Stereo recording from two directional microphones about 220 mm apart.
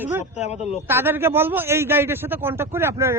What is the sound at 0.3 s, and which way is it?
Speech, 30° left (ahead or behind).